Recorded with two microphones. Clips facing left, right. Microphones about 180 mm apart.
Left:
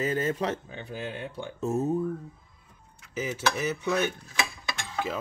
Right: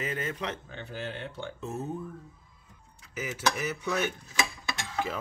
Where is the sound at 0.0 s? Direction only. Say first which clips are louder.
Left 6 dB; 35° left (ahead or behind).